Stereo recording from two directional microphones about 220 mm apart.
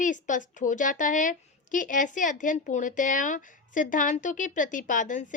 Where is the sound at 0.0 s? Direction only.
35° left (ahead or behind).